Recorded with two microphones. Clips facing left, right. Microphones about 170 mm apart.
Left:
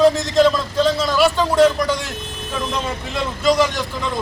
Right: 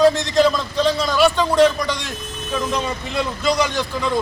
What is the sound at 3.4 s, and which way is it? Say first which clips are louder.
Speech: left 4 dB; centre (ahead or behind).